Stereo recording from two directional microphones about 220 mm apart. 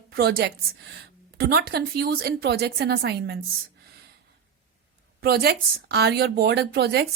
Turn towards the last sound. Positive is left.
turn(degrees=-50)  # may be behind; listen again after turning